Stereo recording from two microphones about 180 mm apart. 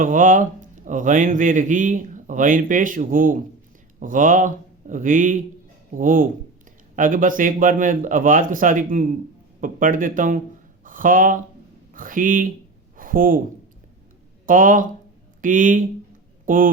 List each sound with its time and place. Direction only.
0.0 s a man's voice: 45° right (ahead or behind)
14.4 s a man's voice: 50° right (ahead or behind)